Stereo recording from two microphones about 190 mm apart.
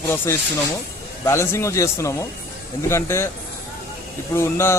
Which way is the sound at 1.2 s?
15° left (ahead or behind).